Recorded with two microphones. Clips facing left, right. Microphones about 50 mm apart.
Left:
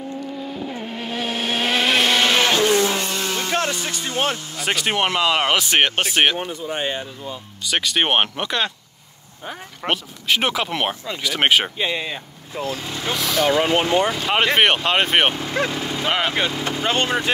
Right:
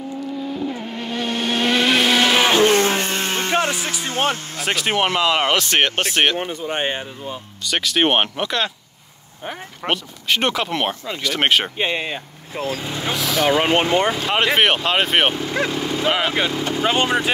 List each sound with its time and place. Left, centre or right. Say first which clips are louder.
0.5 s vehicle: right 3 dB; centre
2.6 s a sound: right 2 dB; right
4.6 s speech: right 1 dB; centre
6.4 s speech: right 2 dB; right
7.6 s speech: right 2 dB; centre
9.8 s speech: even; centre
11.8 s speech: right 2 dB; right
12.8 s speech: right 2 dB; centre
13.1 s speech: even; centre
13.6 s speech: right 1 dB; right
14.1 s speech: even; centre